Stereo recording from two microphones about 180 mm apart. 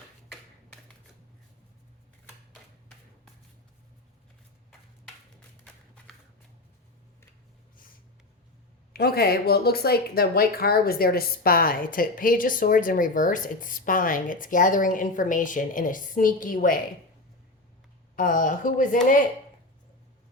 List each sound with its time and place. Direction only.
8.9 s speech: 60° left (ahead or behind)
18.2 s speech: 50° left (ahead or behind)